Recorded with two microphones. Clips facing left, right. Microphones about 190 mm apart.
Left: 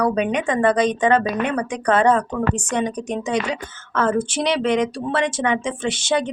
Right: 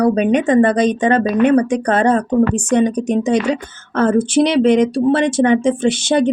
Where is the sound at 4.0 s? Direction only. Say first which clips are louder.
Right 7 dB; 35° right (ahead or behind).